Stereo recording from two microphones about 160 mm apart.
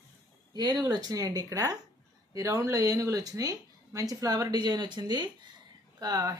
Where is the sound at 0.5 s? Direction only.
25° right (ahead or behind).